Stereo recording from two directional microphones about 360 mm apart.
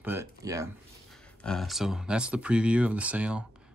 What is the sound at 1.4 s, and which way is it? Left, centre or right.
Speech, centre.